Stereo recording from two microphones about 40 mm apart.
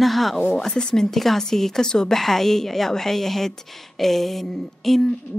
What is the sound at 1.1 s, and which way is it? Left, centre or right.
Speech, centre.